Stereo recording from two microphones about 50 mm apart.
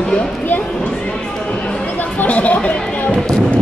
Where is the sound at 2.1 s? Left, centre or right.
Left.